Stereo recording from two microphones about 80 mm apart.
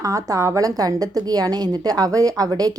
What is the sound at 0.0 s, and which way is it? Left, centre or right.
A woman's voice, right.